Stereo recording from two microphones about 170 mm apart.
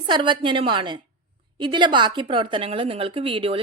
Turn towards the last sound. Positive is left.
turn(degrees=-30)  # may be behind; listen again after turning